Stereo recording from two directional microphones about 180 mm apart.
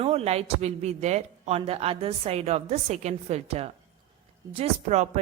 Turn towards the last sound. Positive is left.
turn(degrees=-35)  # may be behind; listen again after turning